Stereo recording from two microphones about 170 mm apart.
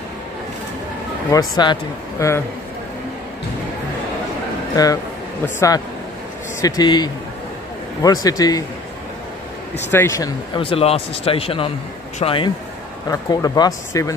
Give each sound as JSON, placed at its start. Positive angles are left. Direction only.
{"t": 1.3, "sound": "speech", "side_deg": 25}
{"t": 5.4, "sound": "a man's voice", "side_deg": 15}
{"t": 9.8, "sound": "speech", "side_deg": 15}
{"t": 13.1, "sound": "speech", "side_deg": 20}